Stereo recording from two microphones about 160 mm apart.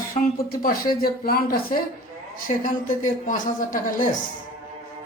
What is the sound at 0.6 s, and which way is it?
Speech, 65° left (ahead or behind).